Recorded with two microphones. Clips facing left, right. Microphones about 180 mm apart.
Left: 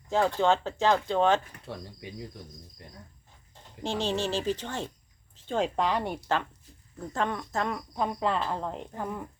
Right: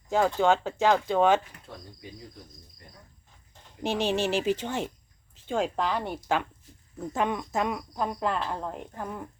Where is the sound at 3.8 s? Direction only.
15° right (ahead or behind).